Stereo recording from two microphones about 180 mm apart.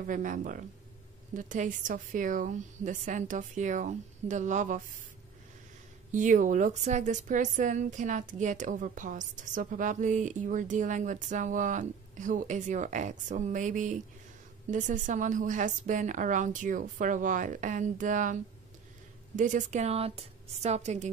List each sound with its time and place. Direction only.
0.0 s a woman's voice: 45° right (ahead or behind)
6.1 s a woman's voice: 45° right (ahead or behind)